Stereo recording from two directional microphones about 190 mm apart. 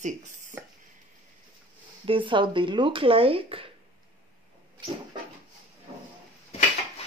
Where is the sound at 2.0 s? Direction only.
25° right (ahead or behind).